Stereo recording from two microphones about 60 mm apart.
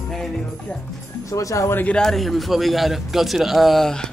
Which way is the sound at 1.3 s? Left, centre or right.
Left.